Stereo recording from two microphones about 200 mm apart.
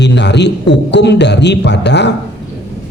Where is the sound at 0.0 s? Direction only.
60° left (ahead or behind).